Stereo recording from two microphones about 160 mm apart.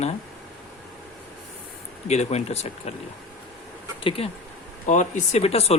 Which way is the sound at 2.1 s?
45° left (ahead or behind).